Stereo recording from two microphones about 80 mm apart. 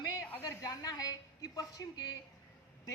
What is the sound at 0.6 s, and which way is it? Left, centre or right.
A woman's voice, left.